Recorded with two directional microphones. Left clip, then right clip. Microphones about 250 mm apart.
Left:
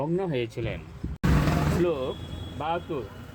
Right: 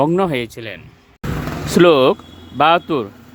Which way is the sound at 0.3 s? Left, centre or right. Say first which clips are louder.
Right 8 dB; right.